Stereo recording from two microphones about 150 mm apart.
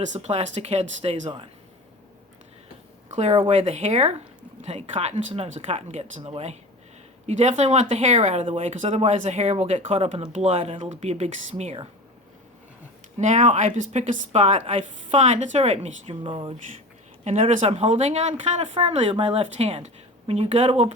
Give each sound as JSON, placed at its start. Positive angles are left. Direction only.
{"t": 0.0, "sound": "speech", "side_deg": -50}
{"t": 3.2, "sound": "speech", "side_deg": -40}
{"t": 13.1, "sound": "speech", "side_deg": -50}
{"t": 17.2, "sound": "speech", "side_deg": -50}